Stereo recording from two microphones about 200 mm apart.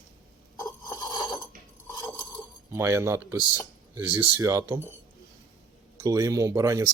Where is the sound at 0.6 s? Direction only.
20° left (ahead or behind).